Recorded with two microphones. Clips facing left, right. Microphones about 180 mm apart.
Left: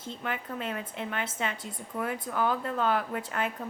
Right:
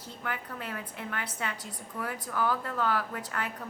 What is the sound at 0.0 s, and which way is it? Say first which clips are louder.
Speech: left 3 dB; 20° left (ahead or behind).